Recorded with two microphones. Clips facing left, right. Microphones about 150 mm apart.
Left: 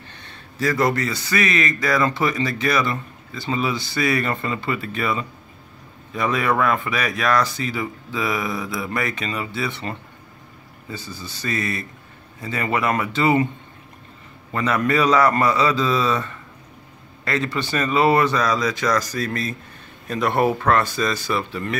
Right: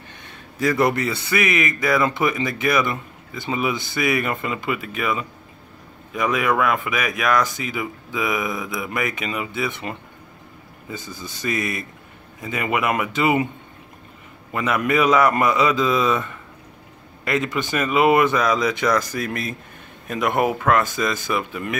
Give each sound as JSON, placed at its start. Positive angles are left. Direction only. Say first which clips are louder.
{"t": 0.2, "sound": "speech", "louder": "right 1 dB", "side_deg": -20}
{"t": 6.4, "sound": "speech", "louder": "left 1 dB", "side_deg": -5}
{"t": 14.5, "sound": "speech", "louder": "even", "side_deg": -10}